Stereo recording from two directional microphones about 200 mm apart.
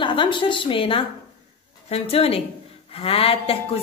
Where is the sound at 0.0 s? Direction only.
25° left (ahead or behind).